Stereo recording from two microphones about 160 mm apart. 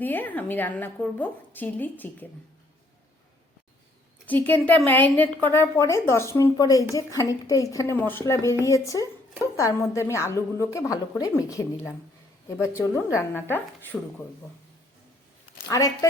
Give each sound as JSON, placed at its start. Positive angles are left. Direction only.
{"t": 0.0, "sound": "a woman's voice", "side_deg": 10}
{"t": 4.3, "sound": "a woman's voice", "side_deg": 10}
{"t": 15.7, "sound": "a woman's voice", "side_deg": 20}